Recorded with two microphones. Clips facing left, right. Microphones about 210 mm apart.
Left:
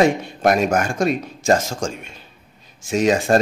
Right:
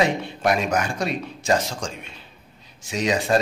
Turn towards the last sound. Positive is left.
turn(degrees=50)  # may be behind; listen again after turning